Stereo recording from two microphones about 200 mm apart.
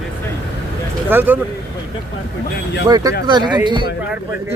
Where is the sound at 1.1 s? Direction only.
10° right (ahead or behind).